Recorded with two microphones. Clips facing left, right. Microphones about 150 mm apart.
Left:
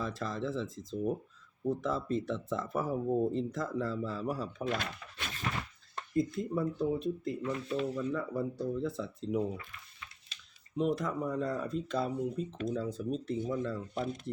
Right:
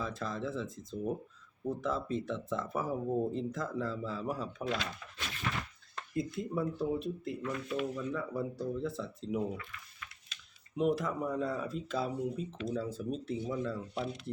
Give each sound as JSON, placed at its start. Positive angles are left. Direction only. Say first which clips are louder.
{"t": 0.0, "sound": "speech", "louder": "left 1 dB", "side_deg": 0}
{"t": 4.7, "sound": "speech", "louder": "left 1 dB", "side_deg": 50}
{"t": 6.1, "sound": "speech", "louder": "left 3 dB", "side_deg": -5}
{"t": 7.4, "sound": "speech", "louder": "left 1 dB", "side_deg": 30}
{"t": 7.9, "sound": "speech", "louder": "left 2 dB", "side_deg": 0}
{"t": 9.6, "sound": "a sound", "louder": "right 1 dB", "side_deg": 30}
{"t": 10.8, "sound": "speech", "louder": "even", "side_deg": -5}
{"t": 13.8, "sound": "speech", "louder": "left 2 dB", "side_deg": 45}